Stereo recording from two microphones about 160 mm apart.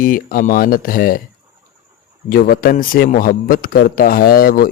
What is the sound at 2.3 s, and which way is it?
Speech, 65° left (ahead or behind).